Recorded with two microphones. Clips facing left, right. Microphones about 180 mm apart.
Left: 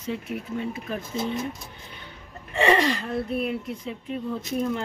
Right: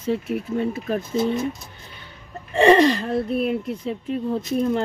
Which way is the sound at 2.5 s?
35° right (ahead or behind).